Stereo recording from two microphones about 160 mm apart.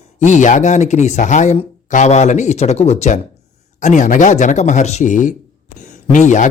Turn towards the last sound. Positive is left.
turn(degrees=50)  # may be behind; listen again after turning